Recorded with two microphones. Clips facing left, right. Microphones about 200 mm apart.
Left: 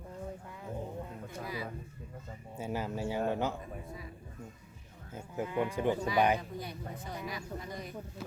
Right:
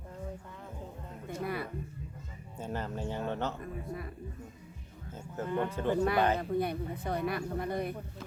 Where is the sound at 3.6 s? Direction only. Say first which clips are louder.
Right 5 dB; 60° right (ahead or behind).